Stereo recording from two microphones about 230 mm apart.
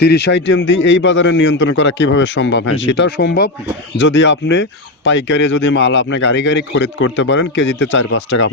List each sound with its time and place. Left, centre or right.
0.0 s a man's voice: left